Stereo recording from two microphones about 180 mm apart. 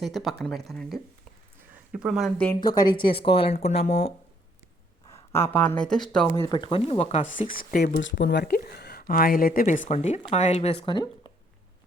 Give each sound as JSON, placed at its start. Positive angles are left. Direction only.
{"t": 0.0, "sound": "speech", "side_deg": 0}
{"t": 2.6, "sound": "speech", "side_deg": 25}
{"t": 5.3, "sound": "speech", "side_deg": 10}
{"t": 6.3, "sound": "a woman's voice", "side_deg": 20}
{"t": 8.0, "sound": "a woman's voice", "side_deg": 70}